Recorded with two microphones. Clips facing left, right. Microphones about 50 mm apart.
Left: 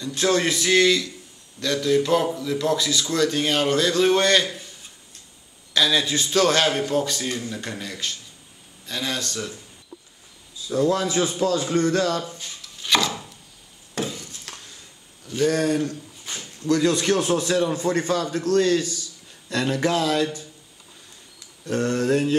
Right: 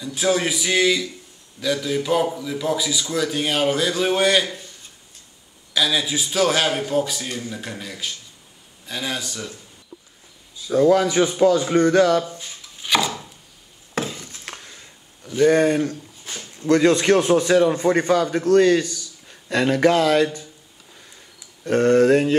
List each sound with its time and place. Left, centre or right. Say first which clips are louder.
0.0 s a man's voice: even; centre
10.7 s a man's voice: right 5 dB; right
11.0 s a man's voice: right 5 dB; right
11.2 s speech: right 5 dB; right
14.3 s a sound: right 4 dB; right
15.2 s speech: right 6 dB; centre
15.6 s a man's voice: right 3 dB; right
21.6 s a man's voice: right 7 dB; right